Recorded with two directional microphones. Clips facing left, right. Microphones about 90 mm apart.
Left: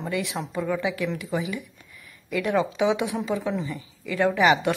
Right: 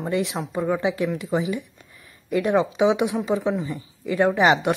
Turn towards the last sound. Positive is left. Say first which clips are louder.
# right 2 dB
turn(degrees=-20)  # may be behind; listen again after turning